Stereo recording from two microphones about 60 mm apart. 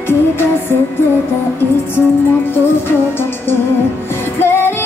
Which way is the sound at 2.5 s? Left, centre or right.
Left.